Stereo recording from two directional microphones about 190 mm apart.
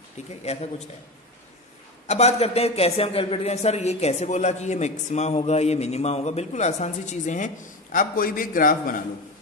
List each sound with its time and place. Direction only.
0.4 s a man's voice: 35° left (ahead or behind)
2.0 s a man's voice: 35° left (ahead or behind)